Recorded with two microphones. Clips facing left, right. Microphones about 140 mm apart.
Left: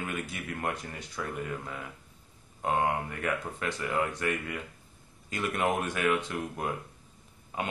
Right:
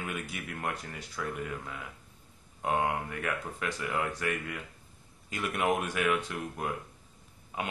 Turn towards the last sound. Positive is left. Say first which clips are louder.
# left 2 dB
turn(degrees=-5)  # may be behind; listen again after turning